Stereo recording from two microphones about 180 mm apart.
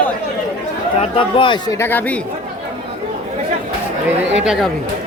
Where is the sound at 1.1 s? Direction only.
25° left (ahead or behind).